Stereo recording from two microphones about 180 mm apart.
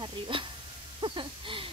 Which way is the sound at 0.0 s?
25° right (ahead or behind).